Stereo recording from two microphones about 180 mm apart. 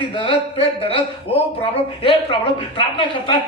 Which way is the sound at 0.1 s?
30° left (ahead or behind).